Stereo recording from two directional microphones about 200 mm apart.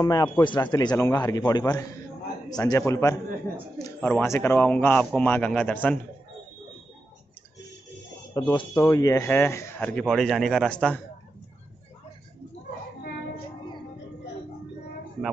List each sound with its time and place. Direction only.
0.0 s a man's voice: 20° left (ahead or behind)
8.3 s a man's voice: 20° left (ahead or behind); by 11.0 s 5° left (ahead or behind)